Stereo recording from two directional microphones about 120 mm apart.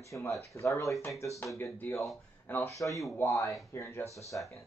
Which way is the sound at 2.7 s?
25° left (ahead or behind).